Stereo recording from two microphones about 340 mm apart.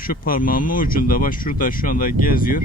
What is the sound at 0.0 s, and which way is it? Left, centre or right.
Speech, left.